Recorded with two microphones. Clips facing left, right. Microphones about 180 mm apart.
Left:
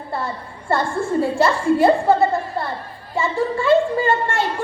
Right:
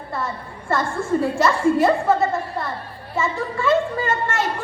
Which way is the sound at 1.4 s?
30° left (ahead or behind).